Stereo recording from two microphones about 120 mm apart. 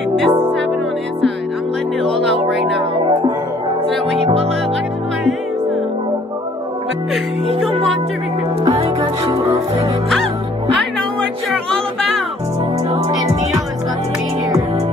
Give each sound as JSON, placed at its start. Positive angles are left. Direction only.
{"t": 2.0, "sound": "music", "side_deg": 0}
{"t": 4.2, "sound": "music", "side_deg": -55}
{"t": 8.7, "sound": "music", "side_deg": -50}
{"t": 9.3, "sound": "speech", "side_deg": -25}